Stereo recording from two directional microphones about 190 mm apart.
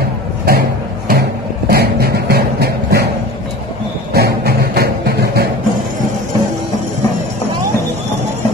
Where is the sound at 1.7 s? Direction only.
55° right (ahead or behind).